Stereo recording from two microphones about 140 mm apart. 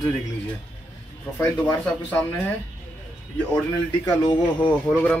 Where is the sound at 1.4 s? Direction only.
10° left (ahead or behind).